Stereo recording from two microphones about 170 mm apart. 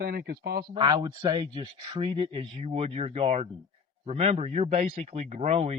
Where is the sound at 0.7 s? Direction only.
25° right (ahead or behind).